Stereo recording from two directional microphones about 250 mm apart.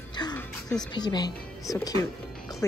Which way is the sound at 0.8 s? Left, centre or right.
Centre.